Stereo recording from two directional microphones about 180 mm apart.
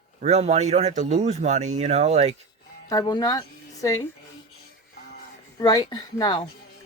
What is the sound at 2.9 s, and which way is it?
Speech, 20° left (ahead or behind).